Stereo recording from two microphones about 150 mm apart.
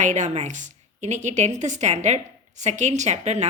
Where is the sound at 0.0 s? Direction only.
55° right (ahead or behind).